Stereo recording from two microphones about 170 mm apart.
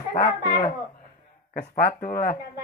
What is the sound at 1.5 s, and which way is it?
Speech, 65° left (ahead or behind).